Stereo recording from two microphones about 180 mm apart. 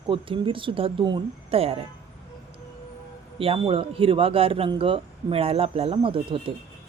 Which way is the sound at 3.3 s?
30° right (ahead or behind).